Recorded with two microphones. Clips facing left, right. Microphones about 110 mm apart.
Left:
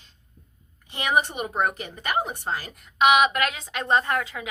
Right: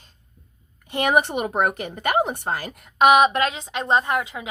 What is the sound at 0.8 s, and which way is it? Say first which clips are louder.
A woman's voice: right 4 dB; 55° right (ahead or behind).